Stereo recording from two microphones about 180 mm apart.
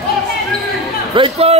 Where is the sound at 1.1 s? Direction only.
30° right (ahead or behind).